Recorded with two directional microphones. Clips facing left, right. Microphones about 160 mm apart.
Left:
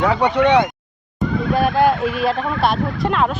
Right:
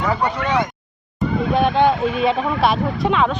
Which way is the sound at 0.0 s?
70° left (ahead or behind).